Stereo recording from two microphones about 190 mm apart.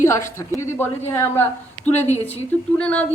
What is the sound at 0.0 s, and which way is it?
A woman's voice, 15° left (ahead or behind).